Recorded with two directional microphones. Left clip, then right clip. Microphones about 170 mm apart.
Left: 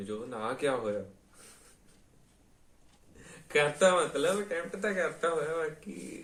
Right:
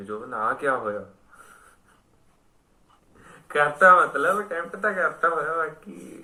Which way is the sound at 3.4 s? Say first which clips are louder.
Right 9 dB; 25° left (ahead or behind).